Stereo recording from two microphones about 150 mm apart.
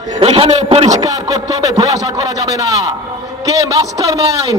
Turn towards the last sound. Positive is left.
turn(degrees=-25)  # may be behind; listen again after turning